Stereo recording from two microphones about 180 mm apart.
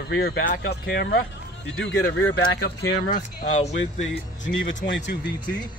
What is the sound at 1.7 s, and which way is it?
Speech, 90° left.